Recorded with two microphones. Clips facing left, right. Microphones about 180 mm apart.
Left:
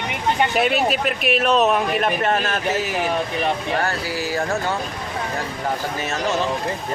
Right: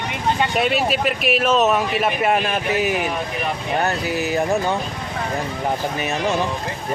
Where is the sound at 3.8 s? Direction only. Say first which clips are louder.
Right 3 dB; 20° right (ahead or behind).